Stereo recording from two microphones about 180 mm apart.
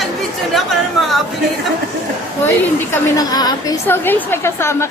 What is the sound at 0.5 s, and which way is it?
Chatter, centre (ahead or behind).